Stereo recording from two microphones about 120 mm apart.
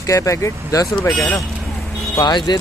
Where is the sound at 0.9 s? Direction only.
5° left (ahead or behind).